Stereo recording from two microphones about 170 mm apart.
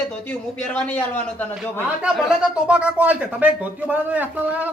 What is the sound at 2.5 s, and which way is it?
Speech, 5° right (ahead or behind).